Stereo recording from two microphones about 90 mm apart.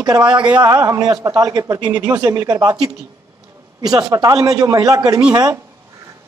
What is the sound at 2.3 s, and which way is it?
Speech, 40° right (ahead or behind).